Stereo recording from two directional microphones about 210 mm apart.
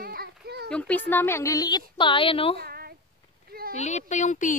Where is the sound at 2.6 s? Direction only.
45° right (ahead or behind).